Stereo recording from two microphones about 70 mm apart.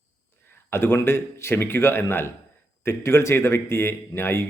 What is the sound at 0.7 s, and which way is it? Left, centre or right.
Speech, left.